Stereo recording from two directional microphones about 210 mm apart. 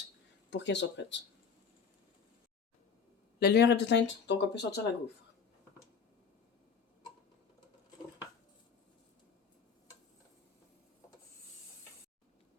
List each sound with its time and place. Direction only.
0.5 s speech: 55° left (ahead or behind)
3.4 s speech: 55° left (ahead or behind)